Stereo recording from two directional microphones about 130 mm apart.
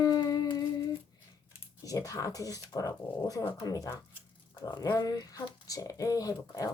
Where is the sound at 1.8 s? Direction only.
25° left (ahead or behind).